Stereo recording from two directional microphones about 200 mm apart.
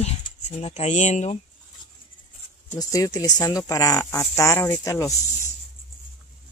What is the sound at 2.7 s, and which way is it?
Speech, 15° left (ahead or behind).